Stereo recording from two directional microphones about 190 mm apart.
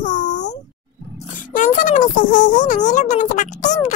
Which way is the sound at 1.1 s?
45° left (ahead or behind).